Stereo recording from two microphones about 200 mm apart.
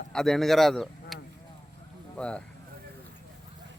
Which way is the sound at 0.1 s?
Centre (ahead or behind).